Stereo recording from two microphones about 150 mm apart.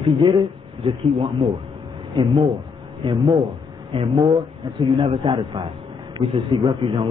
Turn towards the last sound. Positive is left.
turn(degrees=-30)  # may be behind; listen again after turning